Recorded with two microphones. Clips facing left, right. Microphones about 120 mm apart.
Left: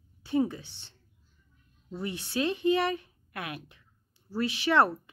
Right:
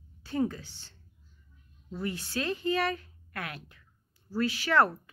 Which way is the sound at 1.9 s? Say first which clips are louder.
Left 1 dB; 20° left (ahead or behind).